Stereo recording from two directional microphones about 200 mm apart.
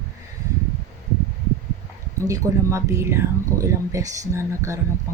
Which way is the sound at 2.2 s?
15° right (ahead or behind).